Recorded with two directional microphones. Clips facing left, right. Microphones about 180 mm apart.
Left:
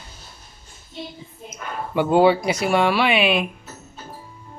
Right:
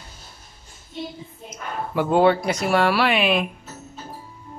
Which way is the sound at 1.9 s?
Centre (ahead or behind).